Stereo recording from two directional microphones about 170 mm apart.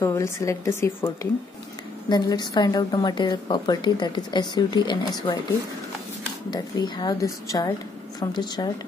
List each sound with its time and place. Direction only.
0.0 s a woman's voice: 20° left (ahead or behind)
6.5 s a woman's voice: 25° left (ahead or behind)